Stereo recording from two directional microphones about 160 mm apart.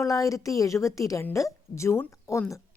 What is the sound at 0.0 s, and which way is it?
A woman's voice, 20° left (ahead or behind).